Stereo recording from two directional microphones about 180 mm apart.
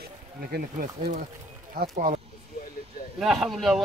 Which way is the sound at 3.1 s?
Centre (ahead or behind).